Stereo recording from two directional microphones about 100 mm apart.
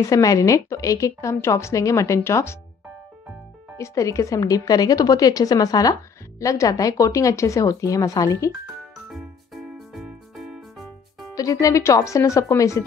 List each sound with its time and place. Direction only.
0.0 s a woman's voice: 35° left (ahead or behind)
3.7 s a woman's voice: 30° left (ahead or behind)
9.1 s music: centre (ahead or behind)
11.3 s a woman's voice: 35° left (ahead or behind)